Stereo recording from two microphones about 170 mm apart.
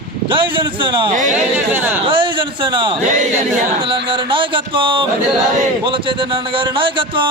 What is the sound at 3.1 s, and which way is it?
Choir, 45° right (ahead or behind).